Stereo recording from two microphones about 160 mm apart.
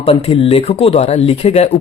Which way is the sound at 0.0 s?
35° left (ahead or behind).